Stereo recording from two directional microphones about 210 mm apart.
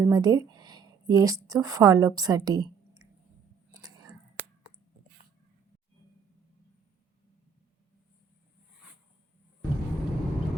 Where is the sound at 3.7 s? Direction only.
20° right (ahead or behind).